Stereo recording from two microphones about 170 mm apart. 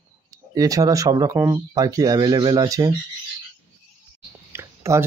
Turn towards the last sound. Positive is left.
turn(degrees=-15)  # may be behind; listen again after turning